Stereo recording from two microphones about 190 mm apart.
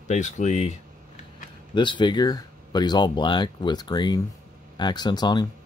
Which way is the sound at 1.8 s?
25° left (ahead or behind).